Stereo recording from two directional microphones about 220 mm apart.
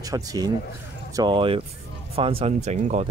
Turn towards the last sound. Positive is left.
turn(degrees=-30)  # may be behind; listen again after turning